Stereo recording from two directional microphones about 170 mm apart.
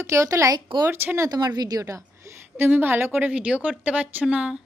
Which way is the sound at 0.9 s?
15° right (ahead or behind).